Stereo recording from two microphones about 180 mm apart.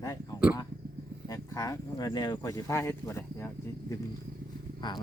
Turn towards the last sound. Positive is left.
turn(degrees=25)  # may be behind; listen again after turning